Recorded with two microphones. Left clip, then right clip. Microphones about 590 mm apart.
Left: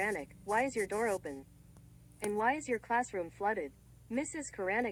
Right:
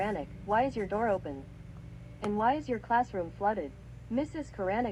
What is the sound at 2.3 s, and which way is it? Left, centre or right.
Speech, left.